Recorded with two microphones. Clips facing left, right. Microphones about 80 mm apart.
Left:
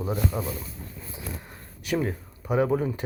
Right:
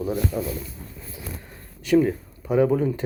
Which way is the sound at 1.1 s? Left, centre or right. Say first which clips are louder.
Even; centre.